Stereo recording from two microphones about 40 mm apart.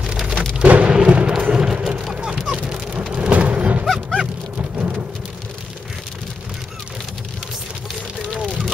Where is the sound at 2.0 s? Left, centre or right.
Centre.